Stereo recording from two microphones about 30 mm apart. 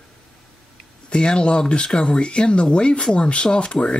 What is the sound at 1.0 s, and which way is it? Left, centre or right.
Speech, left.